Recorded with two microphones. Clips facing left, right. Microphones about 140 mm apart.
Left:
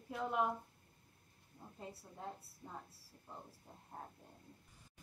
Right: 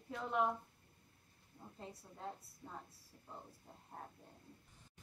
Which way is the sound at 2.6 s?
20° left (ahead or behind).